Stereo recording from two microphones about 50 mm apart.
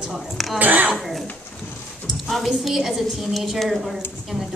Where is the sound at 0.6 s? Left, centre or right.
Right.